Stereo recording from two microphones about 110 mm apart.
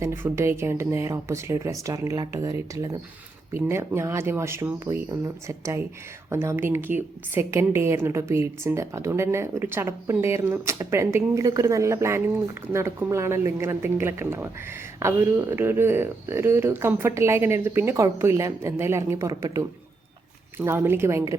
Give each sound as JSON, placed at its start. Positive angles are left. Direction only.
{"t": 0.0, "sound": "a woman's voice", "side_deg": -20}
{"t": 20.6, "sound": "a woman's voice", "side_deg": -20}